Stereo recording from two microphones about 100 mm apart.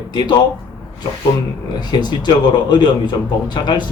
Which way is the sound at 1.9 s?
50° left (ahead or behind).